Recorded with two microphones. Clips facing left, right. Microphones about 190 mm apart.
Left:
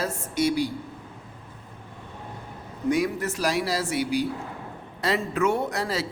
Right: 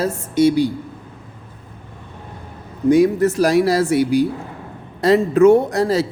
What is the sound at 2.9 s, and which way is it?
Speech, 30° right (ahead or behind).